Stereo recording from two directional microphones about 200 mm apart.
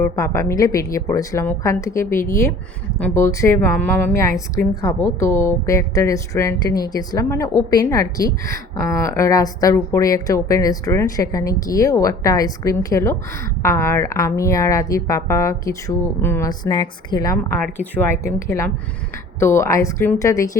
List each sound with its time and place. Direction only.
0.0 s a woman's voice: 15° left (ahead or behind)
17.6 s a woman's voice: 10° left (ahead or behind)